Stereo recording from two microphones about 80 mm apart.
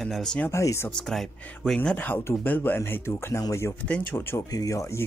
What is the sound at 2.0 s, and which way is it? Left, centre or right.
Speech, left.